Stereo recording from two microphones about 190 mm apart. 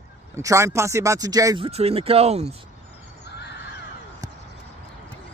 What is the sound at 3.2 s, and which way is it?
Crow, 60° left (ahead or behind).